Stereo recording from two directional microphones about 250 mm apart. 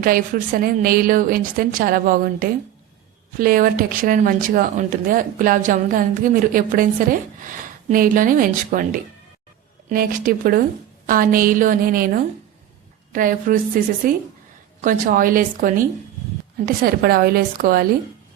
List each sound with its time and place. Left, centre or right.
0.0 s speech: right